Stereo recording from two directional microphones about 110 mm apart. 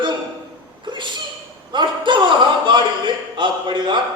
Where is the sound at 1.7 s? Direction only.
45° right (ahead or behind).